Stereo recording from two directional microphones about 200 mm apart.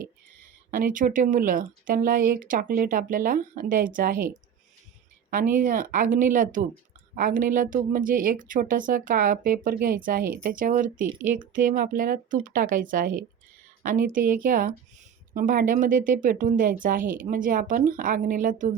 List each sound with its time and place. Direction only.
0.7 s a woman's voice: 45° right (ahead or behind)